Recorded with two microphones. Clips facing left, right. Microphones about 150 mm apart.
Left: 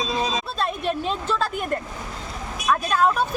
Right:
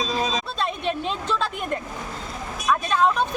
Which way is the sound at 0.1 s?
20° left (ahead or behind).